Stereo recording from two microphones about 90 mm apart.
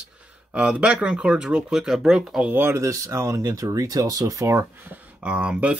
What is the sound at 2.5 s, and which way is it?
Speech, 25° right (ahead or behind).